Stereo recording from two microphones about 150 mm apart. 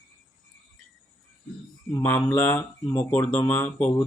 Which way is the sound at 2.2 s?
10° left (ahead or behind).